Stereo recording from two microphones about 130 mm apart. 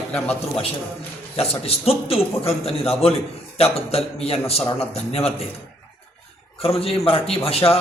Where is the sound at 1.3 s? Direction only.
50° left (ahead or behind).